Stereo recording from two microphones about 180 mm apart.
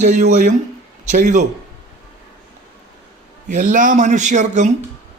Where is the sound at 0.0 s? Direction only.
45° right (ahead or behind).